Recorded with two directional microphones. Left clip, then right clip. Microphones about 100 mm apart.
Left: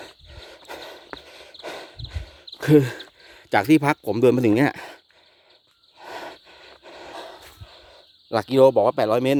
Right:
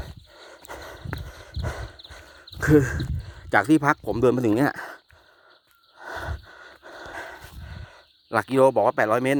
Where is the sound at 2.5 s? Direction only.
20° left (ahead or behind).